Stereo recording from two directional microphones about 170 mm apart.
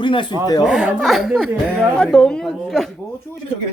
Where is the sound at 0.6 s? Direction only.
5° right (ahead or behind).